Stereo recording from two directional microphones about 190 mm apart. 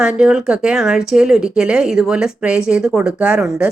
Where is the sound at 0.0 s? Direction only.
5° right (ahead or behind).